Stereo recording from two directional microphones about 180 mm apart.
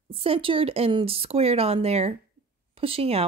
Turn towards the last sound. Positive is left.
turn(degrees=-30)  # may be behind; listen again after turning